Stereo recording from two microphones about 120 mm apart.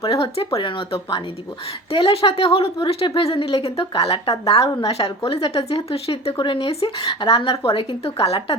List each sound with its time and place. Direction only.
0.0 s speech: 55° left (ahead or behind)